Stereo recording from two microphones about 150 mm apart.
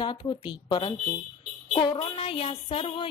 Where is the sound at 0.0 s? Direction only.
30° left (ahead or behind).